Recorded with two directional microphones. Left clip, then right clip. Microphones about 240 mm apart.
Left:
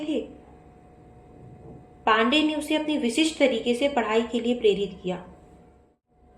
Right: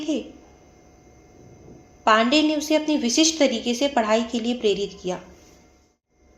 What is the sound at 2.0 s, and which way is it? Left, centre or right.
A woman's voice, right.